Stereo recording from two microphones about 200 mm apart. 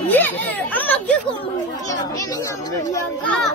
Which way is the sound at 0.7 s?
10° left (ahead or behind).